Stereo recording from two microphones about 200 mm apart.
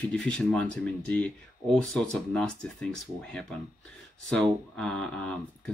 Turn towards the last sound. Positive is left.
turn(degrees=5)  # may be behind; listen again after turning